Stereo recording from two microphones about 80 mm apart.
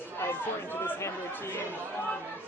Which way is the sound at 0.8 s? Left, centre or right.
Left.